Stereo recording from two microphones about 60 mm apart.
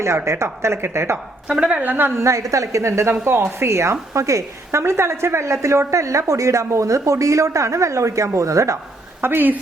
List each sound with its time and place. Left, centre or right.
0.3 s speech: right
1.5 s a woman's voice: centre
1.7 s a woman's voice: right
2.1 s a woman's voice: right
3.1 s speech: right
4.1 s a woman's voice: right
9.2 s speech: right